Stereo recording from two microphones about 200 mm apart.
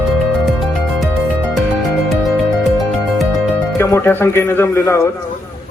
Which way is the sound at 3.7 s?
15° left (ahead or behind).